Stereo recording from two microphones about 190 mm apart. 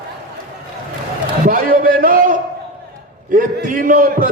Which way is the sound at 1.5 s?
50° right (ahead or behind).